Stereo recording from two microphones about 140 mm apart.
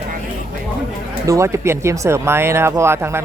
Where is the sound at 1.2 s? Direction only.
20° right (ahead or behind).